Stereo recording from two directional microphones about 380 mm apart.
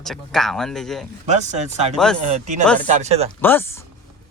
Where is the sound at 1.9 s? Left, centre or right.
Centre.